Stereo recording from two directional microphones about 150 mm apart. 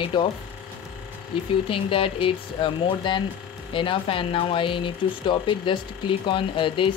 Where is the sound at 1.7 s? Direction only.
35° left (ahead or behind).